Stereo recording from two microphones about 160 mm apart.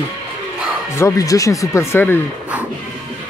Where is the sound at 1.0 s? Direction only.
20° left (ahead or behind).